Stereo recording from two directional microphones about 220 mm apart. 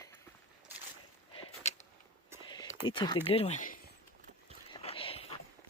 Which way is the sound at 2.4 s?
20° left (ahead or behind).